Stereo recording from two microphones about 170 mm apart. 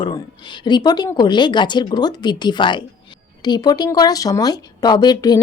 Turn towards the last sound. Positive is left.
turn(degrees=20)  # may be behind; listen again after turning